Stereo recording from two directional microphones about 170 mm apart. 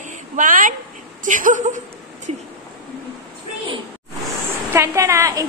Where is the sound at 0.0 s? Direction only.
50° right (ahead or behind).